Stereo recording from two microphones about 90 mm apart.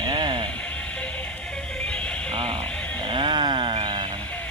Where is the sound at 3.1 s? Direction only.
60° right (ahead or behind).